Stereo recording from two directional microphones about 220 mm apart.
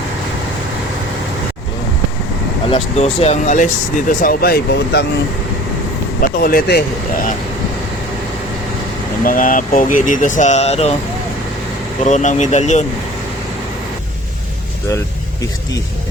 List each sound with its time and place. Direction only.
2.6 s speech: 25° left (ahead or behind); by 5.0 s 50° left (ahead or behind)
6.2 s speech: 40° left (ahead or behind)
9.2 s speech: 35° left (ahead or behind)
12.0 s speech: 35° left (ahead or behind)